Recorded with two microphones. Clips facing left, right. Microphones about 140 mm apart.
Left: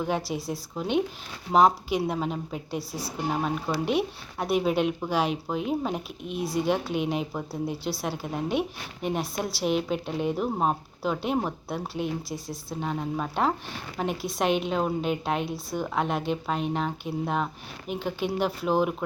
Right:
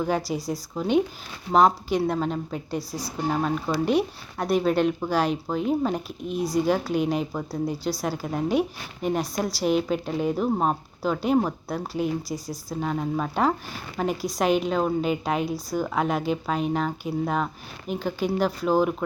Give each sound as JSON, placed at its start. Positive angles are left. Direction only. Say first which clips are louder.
{"t": 0.3, "sound": "speech", "louder": "right 3 dB", "side_deg": 0}